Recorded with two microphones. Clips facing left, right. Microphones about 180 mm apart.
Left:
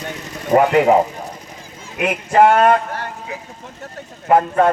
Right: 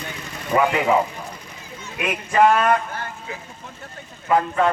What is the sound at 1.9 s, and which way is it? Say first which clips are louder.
Speech: left 5 dB; 55° left (ahead or behind).